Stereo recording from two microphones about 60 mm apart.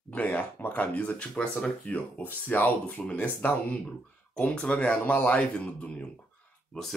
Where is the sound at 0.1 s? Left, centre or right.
Left.